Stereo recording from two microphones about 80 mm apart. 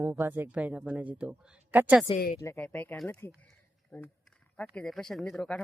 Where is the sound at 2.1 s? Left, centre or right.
Left.